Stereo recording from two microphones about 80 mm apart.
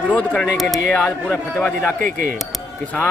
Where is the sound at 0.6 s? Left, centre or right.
Centre.